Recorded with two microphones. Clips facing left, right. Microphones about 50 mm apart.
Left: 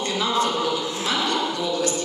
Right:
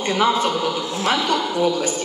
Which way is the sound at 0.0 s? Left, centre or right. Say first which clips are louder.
Right 6 dB; right.